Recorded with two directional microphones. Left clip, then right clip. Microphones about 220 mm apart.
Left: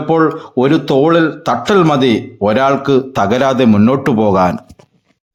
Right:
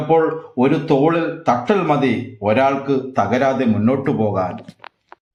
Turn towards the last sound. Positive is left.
turn(degrees=45)  # may be behind; listen again after turning